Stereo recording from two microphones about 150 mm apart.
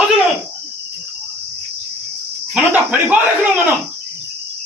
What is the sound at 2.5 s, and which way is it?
Speech, 10° right (ahead or behind).